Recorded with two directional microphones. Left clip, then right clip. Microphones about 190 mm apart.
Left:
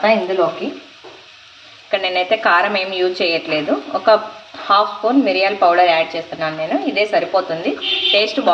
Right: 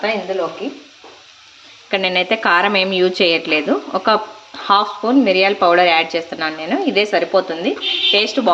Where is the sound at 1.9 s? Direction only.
35° right (ahead or behind).